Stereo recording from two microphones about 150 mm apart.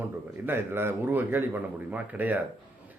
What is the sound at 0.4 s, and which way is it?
Speech, 15° right (ahead or behind).